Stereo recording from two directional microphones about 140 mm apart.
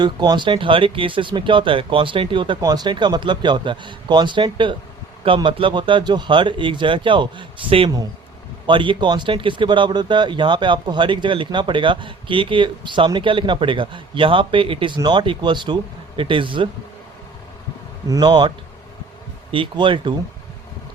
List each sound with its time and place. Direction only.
0.0 s speech: 30° right (ahead or behind)
18.1 s speech: 30° right (ahead or behind)